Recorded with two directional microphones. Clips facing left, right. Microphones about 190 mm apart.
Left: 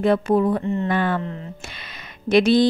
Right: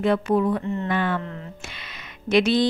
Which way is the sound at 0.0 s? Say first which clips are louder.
Left 3 dB; 40° left (ahead or behind).